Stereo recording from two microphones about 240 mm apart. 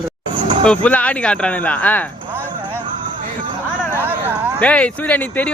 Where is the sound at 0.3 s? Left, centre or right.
Centre.